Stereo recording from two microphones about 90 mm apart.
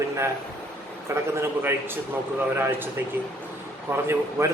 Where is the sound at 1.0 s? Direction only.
30° right (ahead or behind).